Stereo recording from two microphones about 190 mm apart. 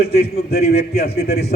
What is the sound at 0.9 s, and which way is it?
Speech, 60° left (ahead or behind).